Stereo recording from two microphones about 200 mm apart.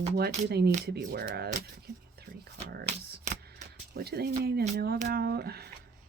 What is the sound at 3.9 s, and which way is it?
Speech, 50° right (ahead or behind).